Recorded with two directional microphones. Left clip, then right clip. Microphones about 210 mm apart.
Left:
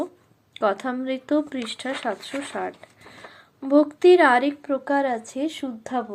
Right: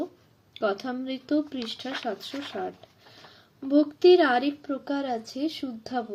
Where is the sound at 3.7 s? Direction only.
5° right (ahead or behind).